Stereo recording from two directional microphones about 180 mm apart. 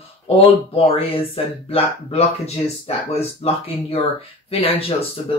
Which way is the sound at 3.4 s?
35° left (ahead or behind).